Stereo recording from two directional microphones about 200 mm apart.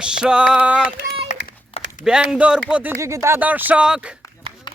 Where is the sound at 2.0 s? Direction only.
5° right (ahead or behind).